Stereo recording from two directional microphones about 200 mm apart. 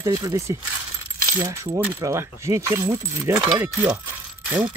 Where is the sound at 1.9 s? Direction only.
15° right (ahead or behind).